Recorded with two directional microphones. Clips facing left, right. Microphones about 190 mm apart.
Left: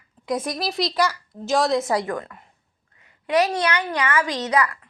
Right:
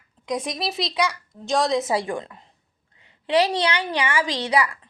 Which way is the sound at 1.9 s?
25° right (ahead or behind).